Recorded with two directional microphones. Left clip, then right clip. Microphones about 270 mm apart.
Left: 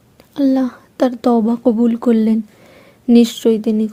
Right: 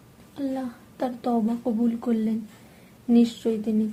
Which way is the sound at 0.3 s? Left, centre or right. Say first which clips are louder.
Left 14 dB; left.